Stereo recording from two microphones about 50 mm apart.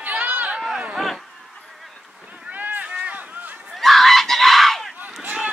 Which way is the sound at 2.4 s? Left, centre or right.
Right.